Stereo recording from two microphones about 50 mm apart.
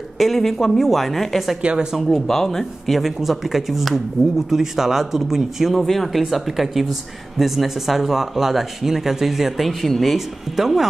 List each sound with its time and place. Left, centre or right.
0.2 s speech: centre
1.6 s speech: centre
2.0 s speech: centre